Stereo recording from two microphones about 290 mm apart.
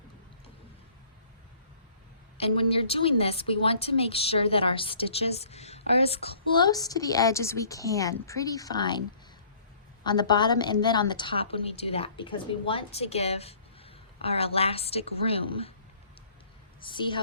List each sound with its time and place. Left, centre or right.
2.4 s a woman's voice: centre
10.0 s a woman's voice: centre
16.8 s a woman's voice: centre